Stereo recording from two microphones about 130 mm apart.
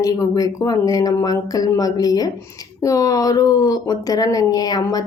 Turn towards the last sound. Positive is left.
turn(degrees=30)  # may be behind; listen again after turning